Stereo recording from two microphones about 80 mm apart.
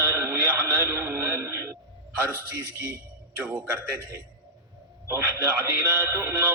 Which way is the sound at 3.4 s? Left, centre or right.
Right.